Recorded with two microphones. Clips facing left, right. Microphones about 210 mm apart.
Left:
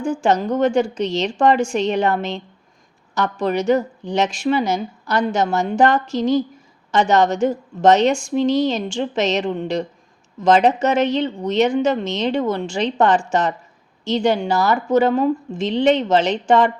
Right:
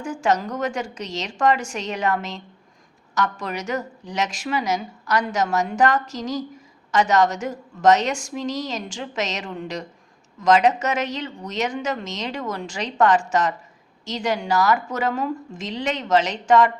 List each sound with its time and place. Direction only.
0.0 s a woman's voice: 30° left (ahead or behind)